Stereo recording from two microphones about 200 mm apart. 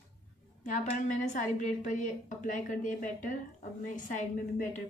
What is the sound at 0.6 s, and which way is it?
A woman's voice, 35° left (ahead or behind).